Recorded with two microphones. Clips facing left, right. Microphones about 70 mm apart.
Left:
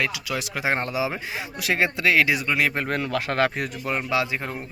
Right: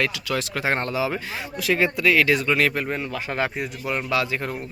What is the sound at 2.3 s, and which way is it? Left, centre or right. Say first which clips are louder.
Speech: right 3 dB; centre.